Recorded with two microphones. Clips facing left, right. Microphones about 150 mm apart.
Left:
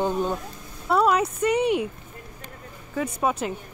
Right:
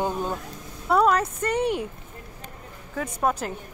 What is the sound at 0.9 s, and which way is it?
Speech, 5° left (ahead or behind).